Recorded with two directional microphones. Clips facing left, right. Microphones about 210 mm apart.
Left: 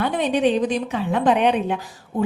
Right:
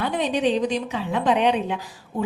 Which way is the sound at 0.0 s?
55° left (ahead or behind).